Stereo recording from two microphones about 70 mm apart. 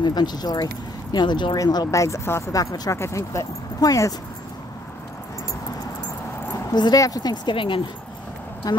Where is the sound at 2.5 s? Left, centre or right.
Left.